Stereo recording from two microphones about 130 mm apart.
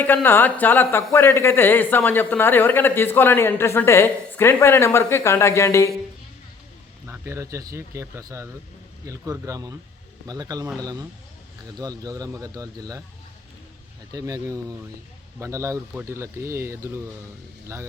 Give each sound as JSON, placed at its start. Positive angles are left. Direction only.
{"t": 0.0, "sound": "speech", "side_deg": 15}
{"t": 7.1, "sound": "speech", "side_deg": -20}
{"t": 14.1, "sound": "speech", "side_deg": -30}